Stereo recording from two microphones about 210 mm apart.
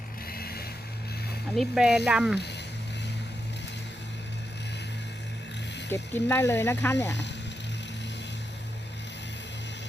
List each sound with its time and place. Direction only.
0.3 s vehicle: 45° left (ahead or behind)
1.5 s speech: 5° right (ahead or behind)
5.9 s speech: 10° left (ahead or behind)